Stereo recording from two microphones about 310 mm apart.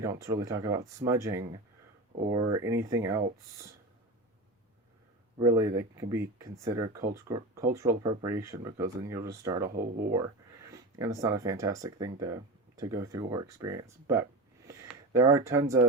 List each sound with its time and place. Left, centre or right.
0.0 s speech: centre
5.4 s speech: centre
9.6 s speech: right
10.7 s speech: centre